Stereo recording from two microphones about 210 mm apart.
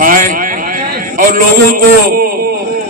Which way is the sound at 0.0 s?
40° right (ahead or behind).